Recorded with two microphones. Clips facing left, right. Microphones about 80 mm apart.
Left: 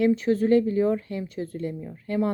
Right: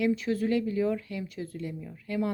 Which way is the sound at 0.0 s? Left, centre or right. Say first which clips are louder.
Left 6 dB; left.